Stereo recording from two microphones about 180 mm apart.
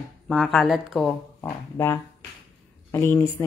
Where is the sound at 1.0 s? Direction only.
15° left (ahead or behind).